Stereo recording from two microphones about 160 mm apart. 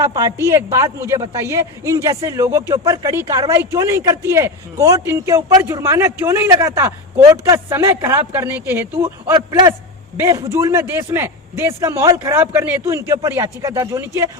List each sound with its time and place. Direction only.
0.0 s speech: 20° right (ahead or behind)
9.3 s speech: 25° right (ahead or behind)